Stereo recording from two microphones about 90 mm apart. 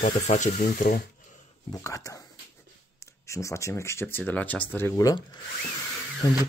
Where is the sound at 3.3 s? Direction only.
35° left (ahead or behind).